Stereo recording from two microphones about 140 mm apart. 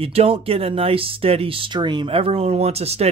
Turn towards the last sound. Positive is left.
turn(degrees=-45)  # may be behind; listen again after turning